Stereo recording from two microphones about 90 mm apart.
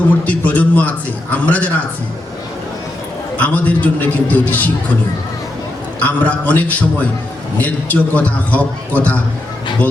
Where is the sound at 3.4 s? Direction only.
15° left (ahead or behind).